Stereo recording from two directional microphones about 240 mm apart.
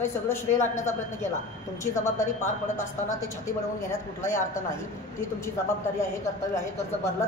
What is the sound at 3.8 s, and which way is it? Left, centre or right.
Speech, centre.